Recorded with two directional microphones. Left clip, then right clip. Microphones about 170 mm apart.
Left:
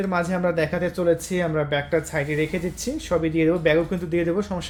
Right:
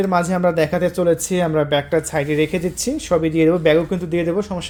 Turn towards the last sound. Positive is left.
turn(degrees=-15)  # may be behind; listen again after turning